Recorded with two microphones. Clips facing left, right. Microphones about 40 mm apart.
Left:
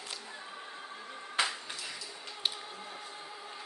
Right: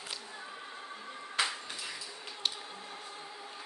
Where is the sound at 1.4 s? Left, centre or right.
Centre.